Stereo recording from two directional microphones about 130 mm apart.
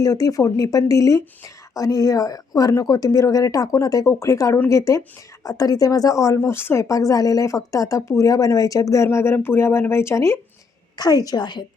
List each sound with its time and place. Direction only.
0.0 s a woman's voice: 25° left (ahead or behind)